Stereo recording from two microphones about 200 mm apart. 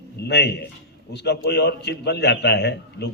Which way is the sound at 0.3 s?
55° left (ahead or behind).